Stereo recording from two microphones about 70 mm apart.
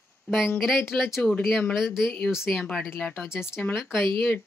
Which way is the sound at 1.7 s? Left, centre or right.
Left.